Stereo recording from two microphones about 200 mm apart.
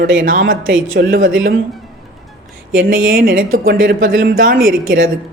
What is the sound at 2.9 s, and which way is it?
Speech, 45° right (ahead or behind).